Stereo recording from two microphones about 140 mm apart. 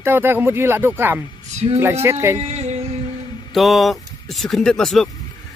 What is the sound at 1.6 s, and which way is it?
Speech, 45° right (ahead or behind).